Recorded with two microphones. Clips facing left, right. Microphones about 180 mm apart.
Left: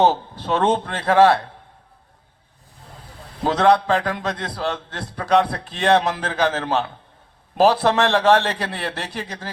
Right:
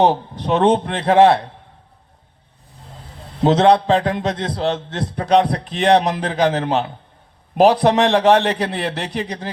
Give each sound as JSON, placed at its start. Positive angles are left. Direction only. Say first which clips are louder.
{"t": 0.0, "sound": "a man's voice", "louder": "right 2 dB", "side_deg": -15}
{"t": 3.4, "sound": "a man's voice", "louder": "right 4 dB", "side_deg": -20}